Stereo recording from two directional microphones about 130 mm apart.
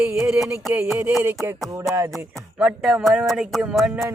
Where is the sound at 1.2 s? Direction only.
15° right (ahead or behind).